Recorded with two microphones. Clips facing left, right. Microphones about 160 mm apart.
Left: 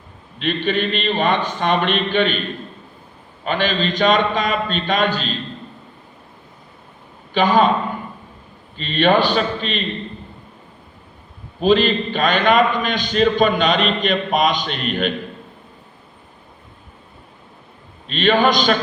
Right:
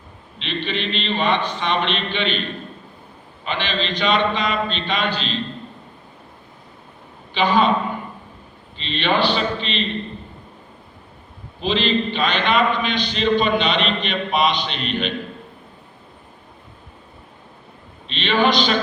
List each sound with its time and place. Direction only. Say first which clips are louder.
0.3 s a man's voice: left 6 dB; 50° left (ahead or behind)
3.4 s a man's voice: left 5 dB; 45° left (ahead or behind)
7.3 s a man's voice: left 3 dB; 45° left (ahead or behind)
8.8 s a man's voice: left 4 dB; 45° left (ahead or behind)
11.6 s a man's voice: left 5 dB; 45° left (ahead or behind)
18.1 s a man's voice: left 3 dB; 45° left (ahead or behind)